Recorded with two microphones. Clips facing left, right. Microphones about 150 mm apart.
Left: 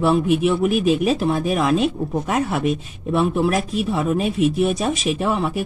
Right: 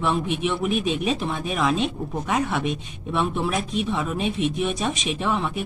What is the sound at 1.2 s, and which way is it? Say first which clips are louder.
Speech: left 7 dB; 40° left (ahead or behind).